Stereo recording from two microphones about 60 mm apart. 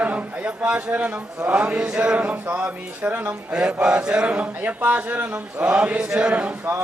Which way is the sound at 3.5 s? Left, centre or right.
Centre.